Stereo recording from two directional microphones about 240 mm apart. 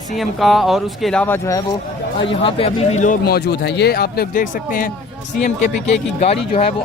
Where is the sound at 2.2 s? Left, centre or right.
Left.